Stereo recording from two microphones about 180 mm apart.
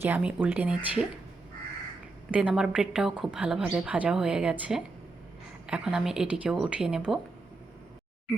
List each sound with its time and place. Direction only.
0.0 s speech: 10° right (ahead or behind)
2.3 s a woman's voice: 5° right (ahead or behind)